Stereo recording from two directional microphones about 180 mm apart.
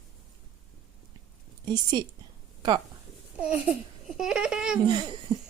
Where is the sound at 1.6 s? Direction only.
25° right (ahead or behind).